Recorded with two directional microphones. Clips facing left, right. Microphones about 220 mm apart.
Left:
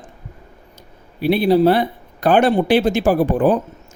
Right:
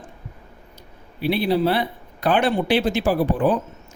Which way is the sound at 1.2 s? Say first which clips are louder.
Left 6 dB; 45° left (ahead or behind).